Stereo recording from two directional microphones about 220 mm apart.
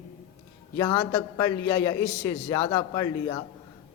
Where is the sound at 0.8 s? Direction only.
20° left (ahead or behind).